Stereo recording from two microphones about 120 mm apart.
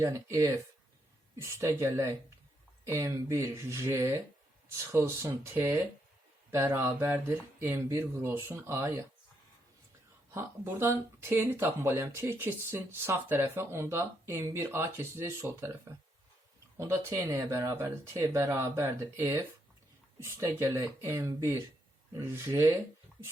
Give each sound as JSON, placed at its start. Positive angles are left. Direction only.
{"t": 0.0, "sound": "speech", "side_deg": -25}
{"t": 10.3, "sound": "speech", "side_deg": -20}